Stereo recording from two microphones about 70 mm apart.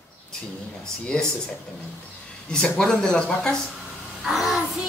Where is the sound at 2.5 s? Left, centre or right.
Centre.